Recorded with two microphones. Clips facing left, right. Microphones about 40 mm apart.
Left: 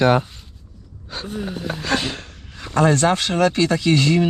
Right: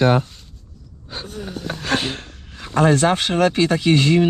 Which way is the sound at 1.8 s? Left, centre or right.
Right.